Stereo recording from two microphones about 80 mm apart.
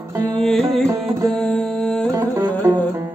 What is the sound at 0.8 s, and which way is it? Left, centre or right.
Music, right.